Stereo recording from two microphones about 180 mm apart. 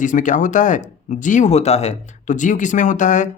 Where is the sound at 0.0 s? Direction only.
45° left (ahead or behind).